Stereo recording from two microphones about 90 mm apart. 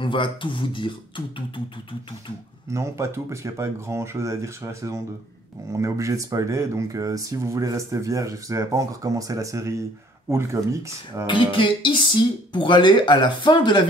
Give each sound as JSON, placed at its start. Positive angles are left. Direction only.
{"t": 0.0, "sound": "speech", "side_deg": 65}
{"t": 2.7, "sound": "speech", "side_deg": -35}
{"t": 11.2, "sound": "speech", "side_deg": 70}